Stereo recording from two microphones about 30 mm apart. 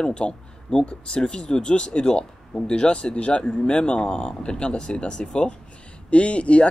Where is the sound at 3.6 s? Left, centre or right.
Left.